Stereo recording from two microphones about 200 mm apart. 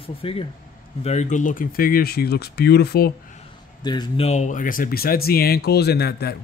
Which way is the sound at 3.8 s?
20° left (ahead or behind).